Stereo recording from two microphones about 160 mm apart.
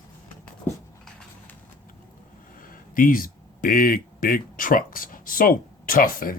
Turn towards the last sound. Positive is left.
turn(degrees=60)  # may be behind; listen again after turning